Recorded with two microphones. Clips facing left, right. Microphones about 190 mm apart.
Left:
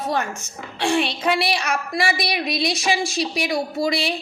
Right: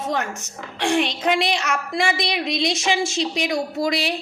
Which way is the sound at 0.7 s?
15° right (ahead or behind).